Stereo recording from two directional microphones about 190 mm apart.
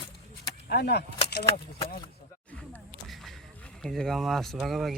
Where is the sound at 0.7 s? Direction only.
60° left (ahead or behind).